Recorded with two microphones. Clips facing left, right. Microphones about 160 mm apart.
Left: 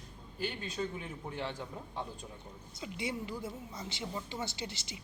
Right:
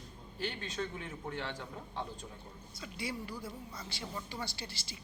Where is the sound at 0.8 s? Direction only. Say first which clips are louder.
Left 2 dB; 10° left (ahead or behind).